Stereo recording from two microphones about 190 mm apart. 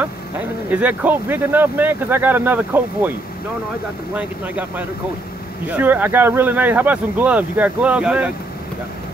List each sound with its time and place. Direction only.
0.7 s speech: 10° right (ahead or behind)
4.1 s speech: 10° right (ahead or behind)